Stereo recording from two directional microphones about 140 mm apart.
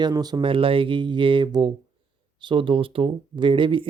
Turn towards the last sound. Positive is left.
turn(degrees=-35)  # may be behind; listen again after turning